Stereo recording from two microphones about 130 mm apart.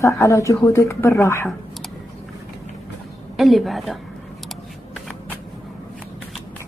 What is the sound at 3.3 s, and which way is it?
Speech, centre (ahead or behind).